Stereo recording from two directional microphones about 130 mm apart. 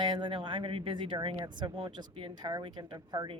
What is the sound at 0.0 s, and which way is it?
A woman's voice, 40° right (ahead or behind).